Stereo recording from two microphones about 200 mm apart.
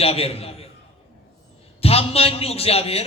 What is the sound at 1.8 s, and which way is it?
A man's voice, 30° left (ahead or behind).